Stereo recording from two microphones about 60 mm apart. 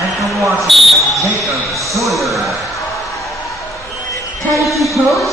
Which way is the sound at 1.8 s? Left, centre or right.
Right.